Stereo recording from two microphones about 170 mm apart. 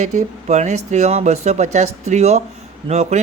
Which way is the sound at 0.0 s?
45° right (ahead or behind).